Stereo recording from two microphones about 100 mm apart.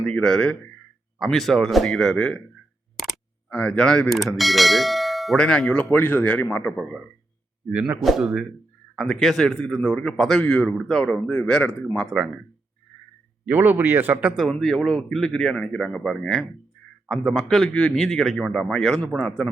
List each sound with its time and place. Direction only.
0.0 s a man's voice: 5° left (ahead or behind)
3.5 s speech: 10° left (ahead or behind)
7.7 s speech: 10° right (ahead or behind)
7.9 s a man's voice: centre (ahead or behind)
13.4 s speech: 20° right (ahead or behind)
14.4 s a man's voice: 5° left (ahead or behind)